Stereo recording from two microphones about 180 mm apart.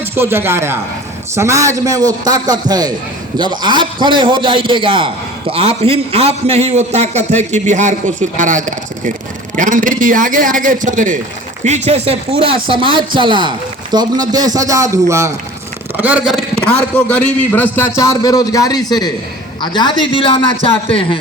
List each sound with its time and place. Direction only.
0.0 s a man's voice: 15° right (ahead or behind); by 21.2 s 30° left (ahead or behind)